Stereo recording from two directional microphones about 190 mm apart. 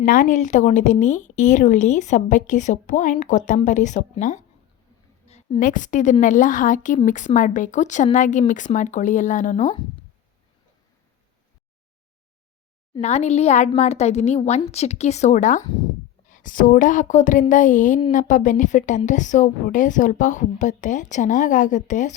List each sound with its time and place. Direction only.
0.0 s a woman's voice: 45° left (ahead or behind)
13.0 s a woman's voice: 35° left (ahead or behind)